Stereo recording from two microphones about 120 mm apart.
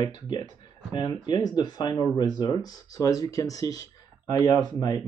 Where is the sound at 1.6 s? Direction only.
35° left (ahead or behind).